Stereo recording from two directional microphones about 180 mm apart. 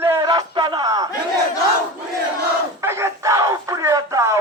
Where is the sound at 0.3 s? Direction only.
25° right (ahead or behind).